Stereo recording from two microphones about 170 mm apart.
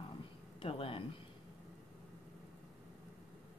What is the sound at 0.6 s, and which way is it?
Speech, 30° left (ahead or behind).